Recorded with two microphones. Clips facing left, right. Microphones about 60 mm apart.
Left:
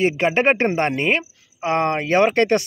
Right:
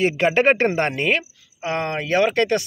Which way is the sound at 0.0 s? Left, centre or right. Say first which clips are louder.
Even; centre.